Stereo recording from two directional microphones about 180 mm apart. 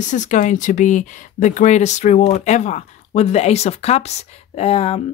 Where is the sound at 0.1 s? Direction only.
45° left (ahead or behind).